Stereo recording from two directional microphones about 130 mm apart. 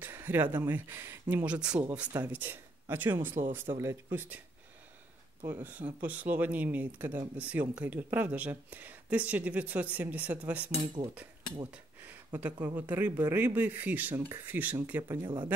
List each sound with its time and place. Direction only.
0.0 s speech: 15° right (ahead or behind)
5.4 s speech: 15° right (ahead or behind)
11.7 s a sound: 10° right (ahead or behind)
12.5 s speech: 15° right (ahead or behind)